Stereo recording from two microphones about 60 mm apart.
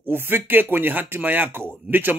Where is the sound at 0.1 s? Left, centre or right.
Right.